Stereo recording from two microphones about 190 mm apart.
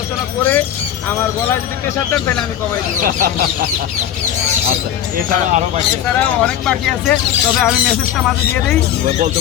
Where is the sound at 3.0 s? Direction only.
45° right (ahead or behind).